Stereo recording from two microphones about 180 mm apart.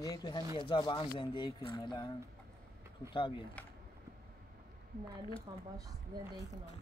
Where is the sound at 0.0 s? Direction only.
20° left (ahead or behind).